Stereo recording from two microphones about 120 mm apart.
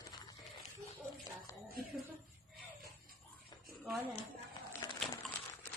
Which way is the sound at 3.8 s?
10° right (ahead or behind).